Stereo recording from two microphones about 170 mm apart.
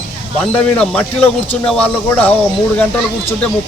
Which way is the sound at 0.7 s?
5° left (ahead or behind).